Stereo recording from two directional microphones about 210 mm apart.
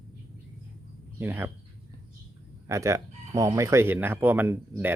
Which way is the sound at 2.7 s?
15° right (ahead or behind).